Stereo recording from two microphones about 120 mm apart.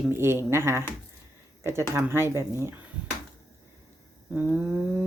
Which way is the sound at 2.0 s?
20° right (ahead or behind).